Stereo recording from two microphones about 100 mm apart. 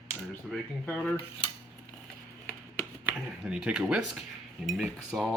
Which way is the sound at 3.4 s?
10° right (ahead or behind).